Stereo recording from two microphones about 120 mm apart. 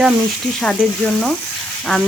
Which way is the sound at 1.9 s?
Centre (ahead or behind).